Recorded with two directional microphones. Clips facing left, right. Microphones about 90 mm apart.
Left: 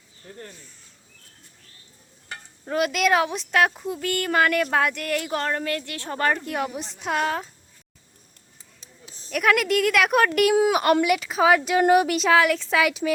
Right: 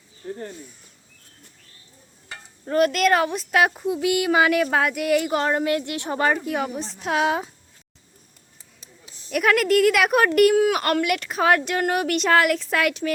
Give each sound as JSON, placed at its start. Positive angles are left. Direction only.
{"t": 2.6, "sound": "speech", "side_deg": 0}
{"t": 6.1, "sound": "speech", "side_deg": -5}
{"t": 7.3, "sound": "speech", "side_deg": -10}
{"t": 9.3, "sound": "speech", "side_deg": 0}
{"t": 10.5, "sound": "speech", "side_deg": 15}
{"t": 11.0, "sound": "speech", "side_deg": 5}